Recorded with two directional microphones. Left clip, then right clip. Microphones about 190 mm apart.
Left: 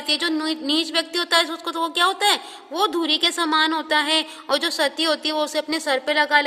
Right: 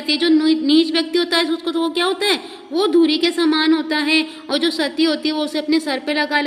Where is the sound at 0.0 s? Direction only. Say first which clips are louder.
Right 6 dB; 45° left (ahead or behind).